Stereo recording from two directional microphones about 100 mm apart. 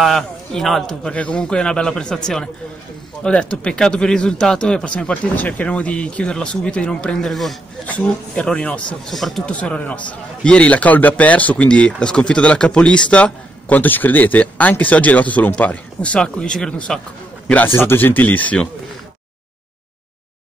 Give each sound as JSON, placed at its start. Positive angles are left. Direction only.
{"t": 0.0, "sound": "a man's voice", "side_deg": 5}
{"t": 7.8, "sound": "a man's voice", "side_deg": 10}
{"t": 9.5, "sound": "a man's voice", "side_deg": 10}
{"t": 17.6, "sound": "speech", "side_deg": 20}